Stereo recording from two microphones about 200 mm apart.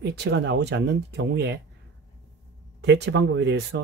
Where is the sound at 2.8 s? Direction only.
60° right (ahead or behind).